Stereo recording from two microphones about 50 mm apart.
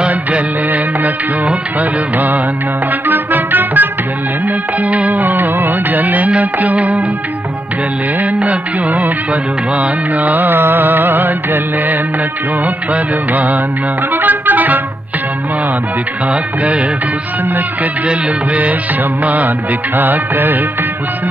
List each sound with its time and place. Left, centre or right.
1.8 s music: right
8.4 s music: right
10.4 s music: right
18.0 s music: right
20.0 s music: right